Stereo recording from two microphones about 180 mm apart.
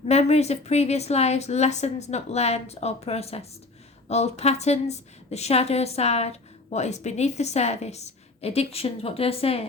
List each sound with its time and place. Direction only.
0.1 s a woman's voice: 35° left (ahead or behind)